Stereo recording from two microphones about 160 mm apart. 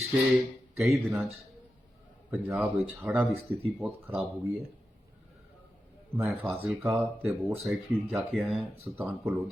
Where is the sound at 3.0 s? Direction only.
15° right (ahead or behind).